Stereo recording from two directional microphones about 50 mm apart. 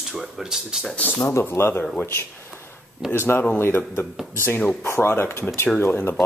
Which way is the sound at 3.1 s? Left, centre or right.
Left.